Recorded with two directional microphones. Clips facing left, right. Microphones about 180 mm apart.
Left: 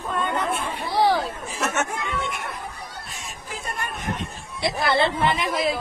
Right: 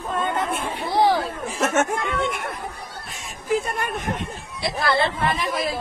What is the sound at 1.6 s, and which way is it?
Speech, 50° right (ahead or behind).